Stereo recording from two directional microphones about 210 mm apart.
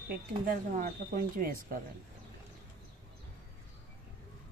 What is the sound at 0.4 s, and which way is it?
Speech, 40° right (ahead or behind).